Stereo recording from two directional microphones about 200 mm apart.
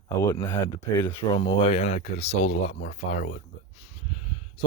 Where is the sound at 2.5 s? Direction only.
60° left (ahead or behind).